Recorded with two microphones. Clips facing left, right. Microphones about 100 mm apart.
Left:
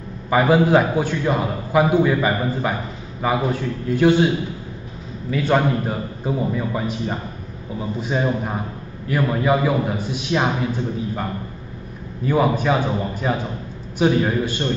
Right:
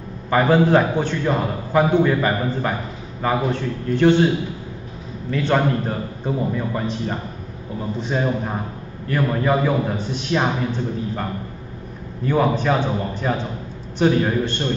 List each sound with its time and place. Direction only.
0.3 s a man's voice: 5° left (ahead or behind)
5.3 s a man's voice: 5° left (ahead or behind)
12.3 s a man's voice: 10° left (ahead or behind)